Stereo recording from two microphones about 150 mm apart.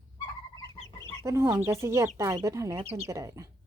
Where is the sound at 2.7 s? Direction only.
40° right (ahead or behind).